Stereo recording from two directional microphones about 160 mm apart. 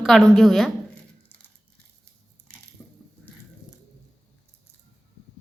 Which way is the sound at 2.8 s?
10° left (ahead or behind).